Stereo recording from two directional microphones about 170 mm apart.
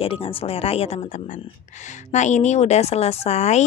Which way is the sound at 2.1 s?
45° left (ahead or behind).